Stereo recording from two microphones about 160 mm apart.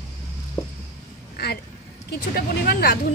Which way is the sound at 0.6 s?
30° left (ahead or behind).